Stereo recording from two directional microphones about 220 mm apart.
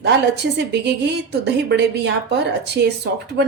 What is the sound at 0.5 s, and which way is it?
A woman's voice, 50° right (ahead or behind).